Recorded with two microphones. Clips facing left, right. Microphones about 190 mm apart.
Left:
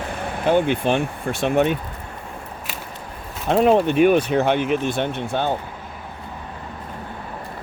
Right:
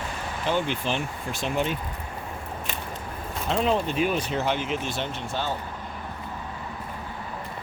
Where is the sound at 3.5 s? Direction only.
55° left (ahead or behind).